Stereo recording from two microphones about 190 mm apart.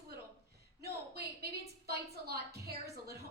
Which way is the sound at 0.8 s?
55° right (ahead or behind).